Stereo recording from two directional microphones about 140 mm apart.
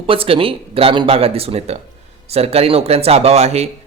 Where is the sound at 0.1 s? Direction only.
40° right (ahead or behind).